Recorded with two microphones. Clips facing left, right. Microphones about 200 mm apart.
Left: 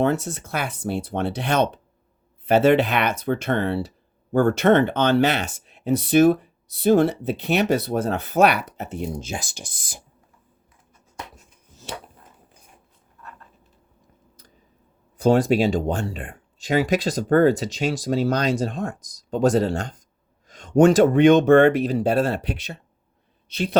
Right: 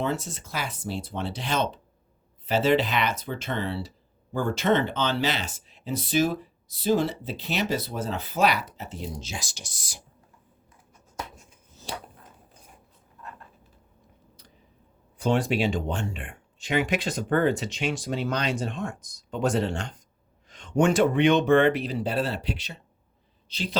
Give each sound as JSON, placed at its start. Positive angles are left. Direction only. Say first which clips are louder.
{"t": 0.0, "sound": "speech", "louder": "left 7 dB", "side_deg": 60}
{"t": 15.2, "sound": "speech", "louder": "left 7 dB", "side_deg": 40}